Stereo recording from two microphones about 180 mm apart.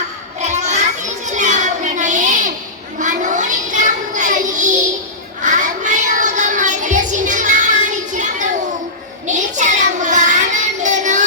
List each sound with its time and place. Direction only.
0.3 s children playing: 40° right (ahead or behind)
3.0 s child singing: 45° right (ahead or behind)